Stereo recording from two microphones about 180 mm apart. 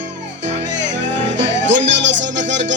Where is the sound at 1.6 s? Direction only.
85° right.